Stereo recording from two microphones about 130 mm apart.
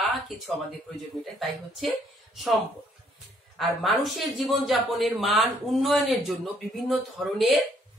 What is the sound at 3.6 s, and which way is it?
Speech, centre (ahead or behind).